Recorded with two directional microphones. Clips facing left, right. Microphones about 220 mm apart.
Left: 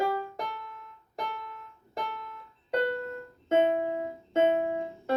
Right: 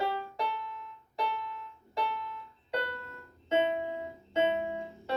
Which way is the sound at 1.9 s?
45° left (ahead or behind).